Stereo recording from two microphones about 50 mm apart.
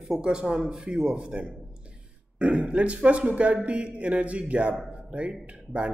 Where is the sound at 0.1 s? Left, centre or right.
Centre.